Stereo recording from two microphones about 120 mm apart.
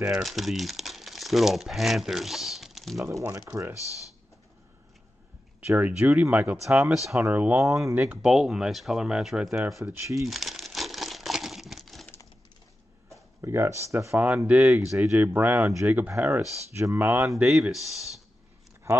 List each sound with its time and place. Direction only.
0.0 s speech: 5° right (ahead or behind)
3.1 s speech: 20° right (ahead or behind)
5.7 s speech: 15° right (ahead or behind)
6.9 s speech: centre (ahead or behind)
7.2 s speech: 15° right (ahead or behind)
7.6 s speech: 25° right (ahead or behind)
8.2 s speech: 5° right (ahead or behind)
9.9 s speech: 25° right (ahead or behind)
10.2 s crumpling: centre (ahead or behind)
13.4 s speech: 25° right (ahead or behind)
14.1 s speech: 10° right (ahead or behind)
17.5 s speech: centre (ahead or behind)
18.9 s speech: 20° right (ahead or behind)